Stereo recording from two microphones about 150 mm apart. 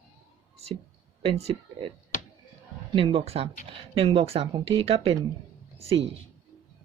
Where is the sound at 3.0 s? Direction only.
40° right (ahead or behind).